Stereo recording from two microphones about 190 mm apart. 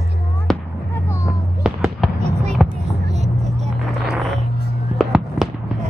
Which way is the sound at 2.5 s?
Centre (ahead or behind).